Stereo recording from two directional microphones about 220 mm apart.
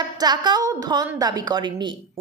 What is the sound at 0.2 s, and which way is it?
A woman's voice, 20° right (ahead or behind).